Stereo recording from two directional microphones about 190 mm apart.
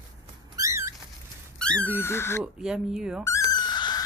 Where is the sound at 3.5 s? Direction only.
20° left (ahead or behind).